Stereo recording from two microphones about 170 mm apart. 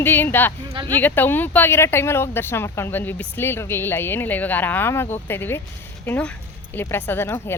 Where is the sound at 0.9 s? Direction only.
10° left (ahead or behind).